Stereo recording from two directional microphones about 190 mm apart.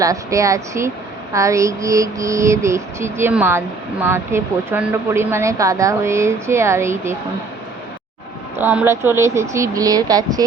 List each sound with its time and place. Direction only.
0.0 s a woman's voice: 15° right (ahead or behind)
8.5 s a woman's voice: 10° right (ahead or behind)